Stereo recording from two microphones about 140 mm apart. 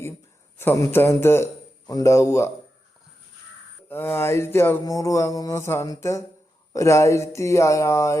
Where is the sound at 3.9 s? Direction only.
15° left (ahead or behind).